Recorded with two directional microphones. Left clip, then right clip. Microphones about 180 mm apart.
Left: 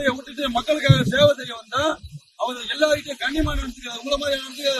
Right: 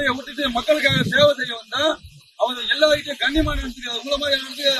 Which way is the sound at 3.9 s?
45° left (ahead or behind).